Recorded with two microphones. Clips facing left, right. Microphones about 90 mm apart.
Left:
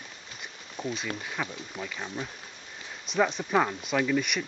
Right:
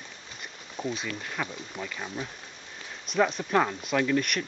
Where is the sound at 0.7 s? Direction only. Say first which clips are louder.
Right 1 dB; centre (ahead or behind).